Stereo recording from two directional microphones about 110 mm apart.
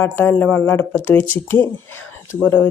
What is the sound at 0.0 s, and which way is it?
A woman's voice, 20° left (ahead or behind).